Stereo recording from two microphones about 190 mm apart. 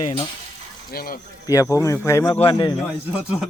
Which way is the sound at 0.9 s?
50° left (ahead or behind).